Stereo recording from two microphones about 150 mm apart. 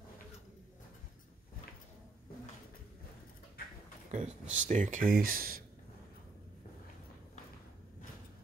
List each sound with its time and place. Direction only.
4.1 s speech: 55° right (ahead or behind); by 5.6 s 75° right (ahead or behind)